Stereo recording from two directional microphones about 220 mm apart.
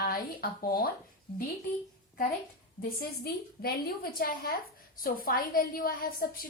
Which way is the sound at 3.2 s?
45° left (ahead or behind).